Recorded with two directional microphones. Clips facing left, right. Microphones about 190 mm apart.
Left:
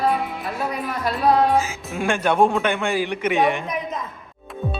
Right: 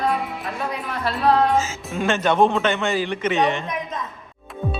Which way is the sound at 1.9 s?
10° left (ahead or behind).